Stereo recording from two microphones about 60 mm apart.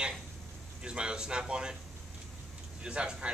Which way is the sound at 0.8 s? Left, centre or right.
Centre.